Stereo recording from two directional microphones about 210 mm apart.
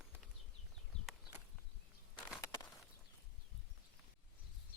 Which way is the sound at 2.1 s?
15° left (ahead or behind).